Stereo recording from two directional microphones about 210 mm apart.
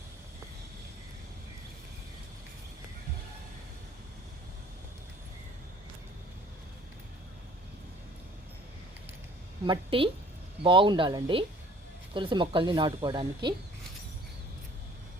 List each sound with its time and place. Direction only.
9.6 s speech: 25° right (ahead or behind)